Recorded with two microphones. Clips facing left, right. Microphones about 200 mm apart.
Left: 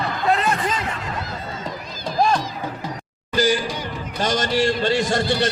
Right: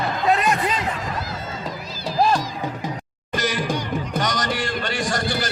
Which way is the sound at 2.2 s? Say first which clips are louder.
Even; centre (ahead or behind).